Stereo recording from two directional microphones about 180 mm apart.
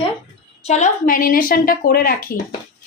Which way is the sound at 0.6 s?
40° left (ahead or behind).